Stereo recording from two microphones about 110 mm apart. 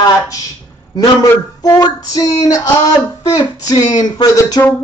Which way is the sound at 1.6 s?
40° left (ahead or behind).